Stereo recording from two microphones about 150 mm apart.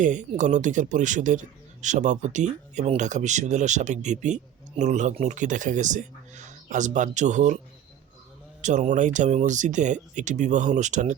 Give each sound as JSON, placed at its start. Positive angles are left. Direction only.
{"t": 0.0, "sound": "speech", "side_deg": -55}
{"t": 8.6, "sound": "speech", "side_deg": -55}